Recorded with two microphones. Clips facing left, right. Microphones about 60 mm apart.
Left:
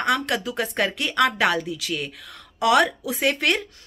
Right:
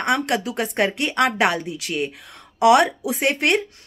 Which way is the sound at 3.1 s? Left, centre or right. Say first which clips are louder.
Right 2 dB; right.